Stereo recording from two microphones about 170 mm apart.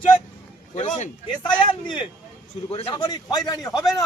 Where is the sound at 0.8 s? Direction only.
45° left (ahead or behind).